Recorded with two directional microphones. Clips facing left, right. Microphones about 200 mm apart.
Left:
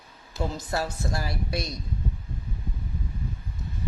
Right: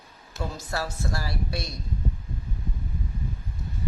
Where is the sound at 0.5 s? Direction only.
20° left (ahead or behind).